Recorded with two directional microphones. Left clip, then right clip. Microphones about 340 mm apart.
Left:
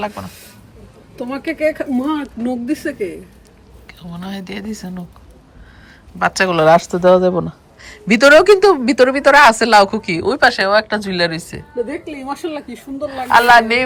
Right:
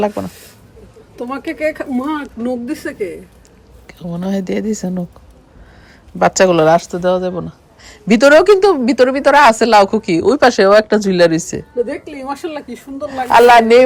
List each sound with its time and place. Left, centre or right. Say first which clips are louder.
0.0 s speech: right 6 dB; centre
3.8 s speech: right 7 dB; centre
6.1 s speech: right 4 dB; centre
12.0 s speech: right 1 dB; right
13.1 s speech: right 2 dB; centre